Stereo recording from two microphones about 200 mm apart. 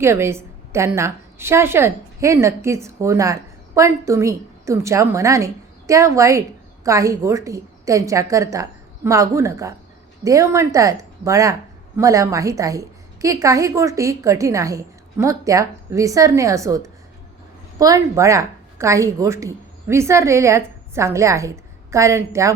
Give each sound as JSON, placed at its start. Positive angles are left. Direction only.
{"t": 0.0, "sound": "a woman's voice", "side_deg": -15}